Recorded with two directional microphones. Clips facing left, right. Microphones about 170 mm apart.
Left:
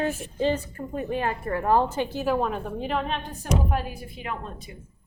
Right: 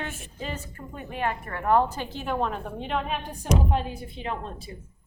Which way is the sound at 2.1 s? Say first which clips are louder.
Left 2 dB; 5° left (ahead or behind).